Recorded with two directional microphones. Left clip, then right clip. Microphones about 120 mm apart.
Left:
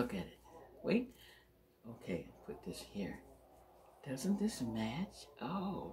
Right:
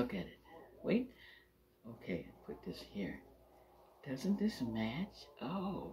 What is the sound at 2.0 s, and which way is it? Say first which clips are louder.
Speech: even; 30° left (ahead or behind).